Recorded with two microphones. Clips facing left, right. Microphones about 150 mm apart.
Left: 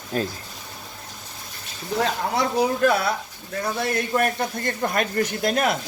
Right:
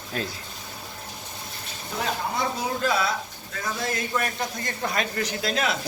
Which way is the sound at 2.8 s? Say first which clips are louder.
Left 4 dB; 55° left (ahead or behind).